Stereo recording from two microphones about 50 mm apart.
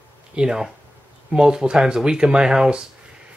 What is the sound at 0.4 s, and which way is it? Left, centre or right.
Speech, centre.